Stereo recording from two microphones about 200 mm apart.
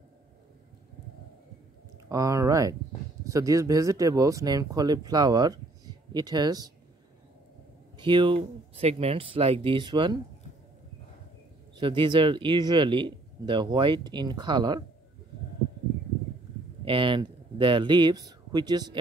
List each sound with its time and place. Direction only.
2.0 s speech: 15° right (ahead or behind)
8.0 s speech: 25° right (ahead or behind)
11.7 s speech: 25° right (ahead or behind)
16.8 s speech: 25° right (ahead or behind)